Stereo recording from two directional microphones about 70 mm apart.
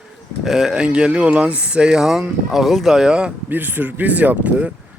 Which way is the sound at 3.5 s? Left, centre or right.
Right.